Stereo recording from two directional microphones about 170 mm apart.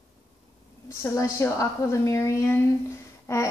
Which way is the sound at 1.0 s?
15° left (ahead or behind).